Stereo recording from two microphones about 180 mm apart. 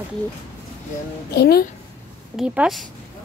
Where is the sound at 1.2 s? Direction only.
65° left (ahead or behind).